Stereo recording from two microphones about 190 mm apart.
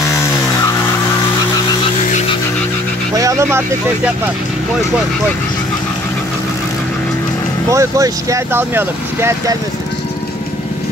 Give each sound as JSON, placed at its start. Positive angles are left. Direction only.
{"t": 3.2, "sound": "speech", "side_deg": -15}
{"t": 7.7, "sound": "speech", "side_deg": -15}